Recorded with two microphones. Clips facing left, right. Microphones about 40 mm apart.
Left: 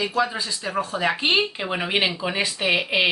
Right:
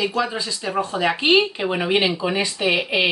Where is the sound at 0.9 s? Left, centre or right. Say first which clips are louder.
Right 4 dB; centre.